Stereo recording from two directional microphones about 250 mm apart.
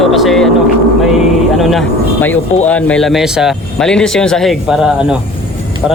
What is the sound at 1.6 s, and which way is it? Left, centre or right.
Speech, centre.